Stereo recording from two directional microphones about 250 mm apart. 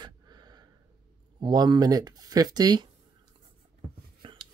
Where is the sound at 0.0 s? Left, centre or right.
Centre.